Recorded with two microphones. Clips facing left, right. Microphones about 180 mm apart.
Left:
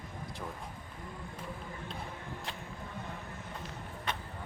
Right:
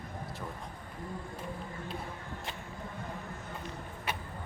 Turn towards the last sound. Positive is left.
turn(degrees=-5)  # may be behind; listen again after turning